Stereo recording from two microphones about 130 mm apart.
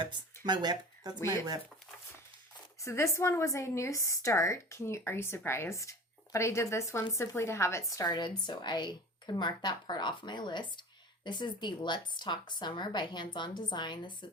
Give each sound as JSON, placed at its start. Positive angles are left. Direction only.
{"t": 0.4, "sound": "speech", "side_deg": -35}
{"t": 2.8, "sound": "a woman's voice", "side_deg": 20}